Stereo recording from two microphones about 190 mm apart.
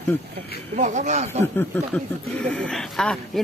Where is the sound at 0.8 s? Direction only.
40° right (ahead or behind).